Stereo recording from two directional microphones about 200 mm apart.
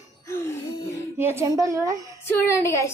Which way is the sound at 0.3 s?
15° left (ahead or behind).